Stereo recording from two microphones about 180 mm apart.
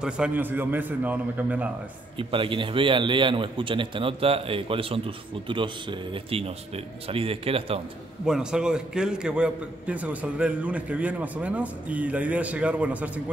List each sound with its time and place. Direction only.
0.0 s a man's voice: 5° right (ahead or behind)
2.1 s a man's voice: 30° right (ahead or behind)
8.3 s a man's voice: 5° right (ahead or behind)